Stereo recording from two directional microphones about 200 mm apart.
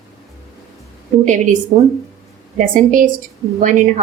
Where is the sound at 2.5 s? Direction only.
40° right (ahead or behind).